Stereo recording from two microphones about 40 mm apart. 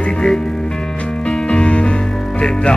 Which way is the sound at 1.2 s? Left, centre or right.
Centre.